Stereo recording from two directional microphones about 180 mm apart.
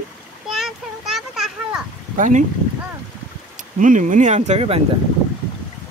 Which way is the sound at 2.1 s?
45° right (ahead or behind).